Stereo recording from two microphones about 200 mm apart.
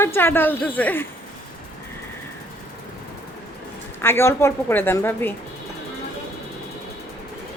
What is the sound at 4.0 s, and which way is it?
A woman's voice, 10° left (ahead or behind).